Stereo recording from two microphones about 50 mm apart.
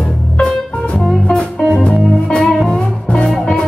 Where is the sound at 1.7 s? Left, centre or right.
Left.